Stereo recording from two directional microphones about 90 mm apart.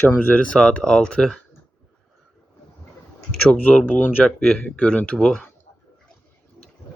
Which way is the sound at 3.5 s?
20° left (ahead or behind).